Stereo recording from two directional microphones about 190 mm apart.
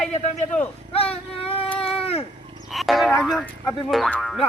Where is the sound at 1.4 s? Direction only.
30° left (ahead or behind).